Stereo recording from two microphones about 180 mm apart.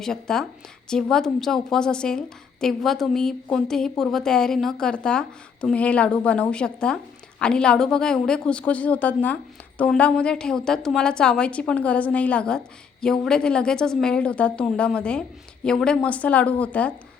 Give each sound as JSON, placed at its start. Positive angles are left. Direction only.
{"t": 0.0, "sound": "a woman's voice", "side_deg": 5}